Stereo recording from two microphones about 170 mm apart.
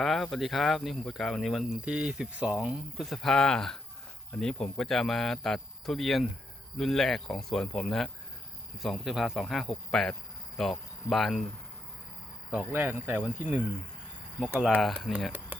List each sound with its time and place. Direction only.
0.0 s speech: centre (ahead or behind)
12.5 s speech: 10° right (ahead or behind)
14.5 s speech: 5° right (ahead or behind)